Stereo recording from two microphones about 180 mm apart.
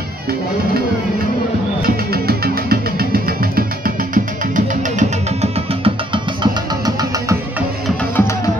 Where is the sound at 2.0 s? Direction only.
60° right (ahead or behind); by 7.3 s 20° right (ahead or behind).